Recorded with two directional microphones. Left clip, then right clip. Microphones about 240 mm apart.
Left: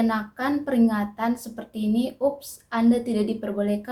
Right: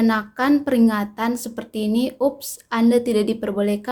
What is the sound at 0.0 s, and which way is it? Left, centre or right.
A woman's voice, right.